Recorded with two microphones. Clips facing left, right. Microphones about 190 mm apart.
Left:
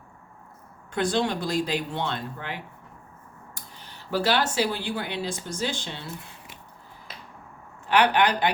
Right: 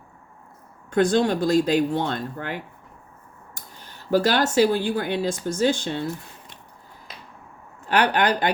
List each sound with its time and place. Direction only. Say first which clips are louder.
0.9 s speech: right 6 dB; 45° right (ahead or behind)
7.9 s speech: right 1 dB; 45° right (ahead or behind)